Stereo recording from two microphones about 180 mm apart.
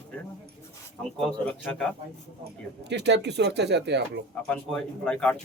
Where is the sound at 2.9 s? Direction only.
70° right (ahead or behind).